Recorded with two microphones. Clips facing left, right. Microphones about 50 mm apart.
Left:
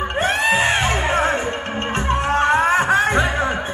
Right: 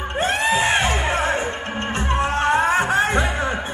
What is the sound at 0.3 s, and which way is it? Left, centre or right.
Music, left.